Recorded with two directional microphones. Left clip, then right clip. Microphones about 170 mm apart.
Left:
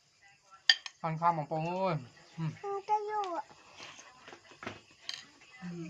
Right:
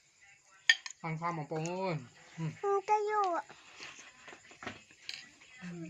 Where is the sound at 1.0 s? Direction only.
25° left (ahead or behind).